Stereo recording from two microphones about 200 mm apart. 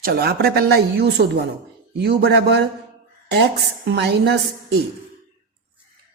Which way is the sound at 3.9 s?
55° right (ahead or behind).